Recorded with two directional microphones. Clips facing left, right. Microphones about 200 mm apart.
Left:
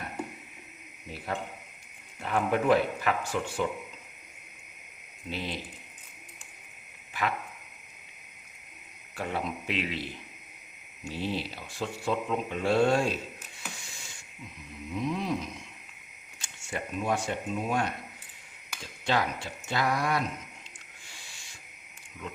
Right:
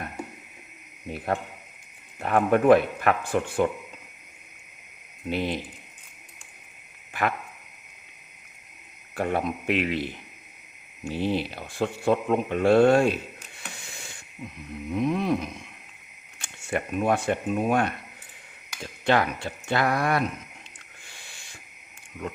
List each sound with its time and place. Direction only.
1.1 s speech: 55° right (ahead or behind)
5.3 s speech: 55° right (ahead or behind)
7.1 s a sound: 55° right (ahead or behind)
9.1 s speech: 55° right (ahead or behind)
13.8 s a sound: 60° right (ahead or behind)
16.4 s speech: 60° right (ahead or behind)